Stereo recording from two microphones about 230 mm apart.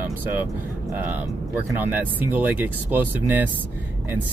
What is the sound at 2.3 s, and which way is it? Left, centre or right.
Speech, centre.